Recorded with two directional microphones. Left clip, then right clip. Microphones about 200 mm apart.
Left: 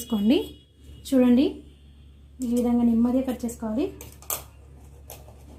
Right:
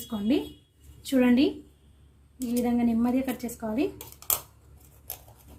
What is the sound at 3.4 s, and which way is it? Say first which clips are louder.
Speech: left 4 dB; 20° left (ahead or behind).